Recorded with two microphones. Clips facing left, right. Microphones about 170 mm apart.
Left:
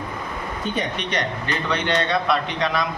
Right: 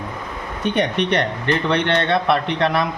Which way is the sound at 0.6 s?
65° right (ahead or behind).